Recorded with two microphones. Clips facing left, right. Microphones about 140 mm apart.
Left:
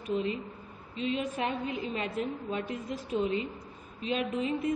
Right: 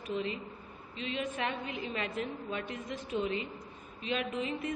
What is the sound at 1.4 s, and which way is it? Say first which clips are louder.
A man's voice: left 4 dB; 35° left (ahead or behind).